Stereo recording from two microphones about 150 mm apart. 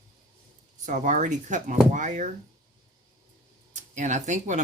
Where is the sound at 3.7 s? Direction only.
55° right (ahead or behind).